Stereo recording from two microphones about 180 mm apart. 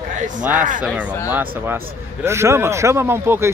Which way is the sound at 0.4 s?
10° right (ahead or behind).